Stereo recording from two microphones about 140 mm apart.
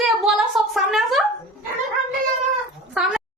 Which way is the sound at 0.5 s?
Centre (ahead or behind).